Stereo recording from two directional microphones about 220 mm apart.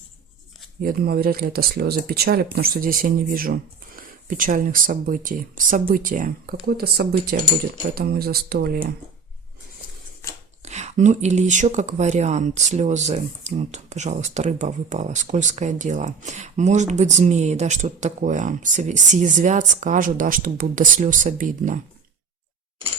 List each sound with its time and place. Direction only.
0.8 s speech: 45° right (ahead or behind)
10.6 s speech: 30° right (ahead or behind)